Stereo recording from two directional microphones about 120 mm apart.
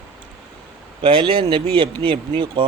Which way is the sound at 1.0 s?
45° right (ahead or behind).